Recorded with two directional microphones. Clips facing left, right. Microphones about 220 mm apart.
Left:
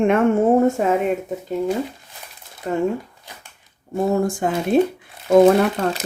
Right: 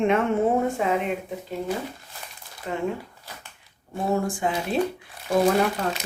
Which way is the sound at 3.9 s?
45° left (ahead or behind).